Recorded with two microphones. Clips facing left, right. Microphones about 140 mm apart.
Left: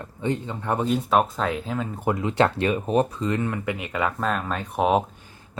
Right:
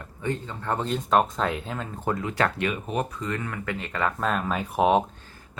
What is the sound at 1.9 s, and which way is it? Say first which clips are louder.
Speech: left 4 dB; 15° left (ahead or behind).